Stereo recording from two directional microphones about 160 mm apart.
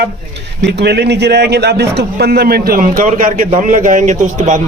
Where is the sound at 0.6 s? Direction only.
90° right.